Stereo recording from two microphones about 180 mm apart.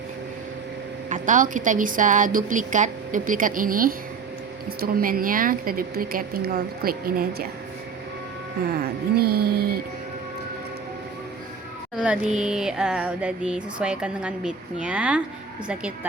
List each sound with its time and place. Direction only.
1.1 s a woman's voice: 45° right (ahead or behind)
8.6 s speech: 60° right (ahead or behind)
11.9 s speech: 5° right (ahead or behind)